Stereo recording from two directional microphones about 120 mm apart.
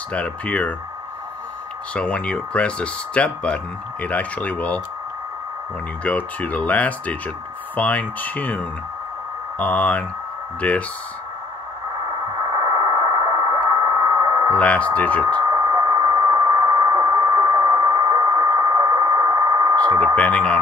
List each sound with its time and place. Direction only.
0.1 s speech: 10° left (ahead or behind)
2.0 s speech: 10° left (ahead or behind)
6.0 s speech: 10° left (ahead or behind)
11.9 s a sound: 35° right (ahead or behind)
14.6 s speech: 10° left (ahead or behind)
15.2 s radio: 35° right (ahead or behind)
20.2 s speech: 10° left (ahead or behind)